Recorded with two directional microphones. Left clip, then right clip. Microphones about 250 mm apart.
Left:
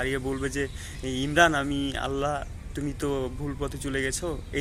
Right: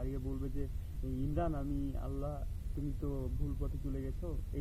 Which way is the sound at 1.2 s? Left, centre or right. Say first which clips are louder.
Left 18 dB; left.